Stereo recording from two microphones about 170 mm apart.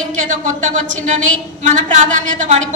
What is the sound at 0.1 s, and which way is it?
A woman's voice, 45° right (ahead or behind).